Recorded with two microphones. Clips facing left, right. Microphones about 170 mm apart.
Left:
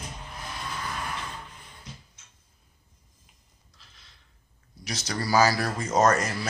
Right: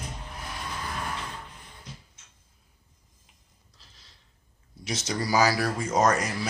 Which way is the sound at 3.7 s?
35° right (ahead or behind).